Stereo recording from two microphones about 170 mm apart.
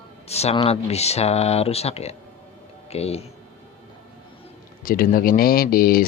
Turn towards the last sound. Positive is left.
turn(degrees=60)  # may be behind; listen again after turning